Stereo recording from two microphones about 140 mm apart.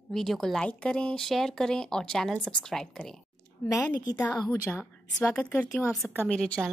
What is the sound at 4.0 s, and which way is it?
A woman's voice, 25° left (ahead or behind).